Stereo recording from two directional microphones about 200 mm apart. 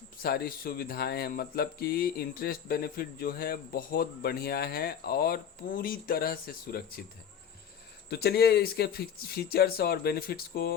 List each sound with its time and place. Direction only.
0.2 s speech: 50° left (ahead or behind)
8.1 s speech: 55° left (ahead or behind)